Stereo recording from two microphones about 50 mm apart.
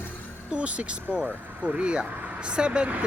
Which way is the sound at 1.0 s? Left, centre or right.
Right.